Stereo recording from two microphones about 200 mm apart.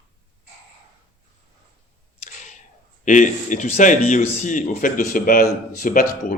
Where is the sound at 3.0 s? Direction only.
40° left (ahead or behind).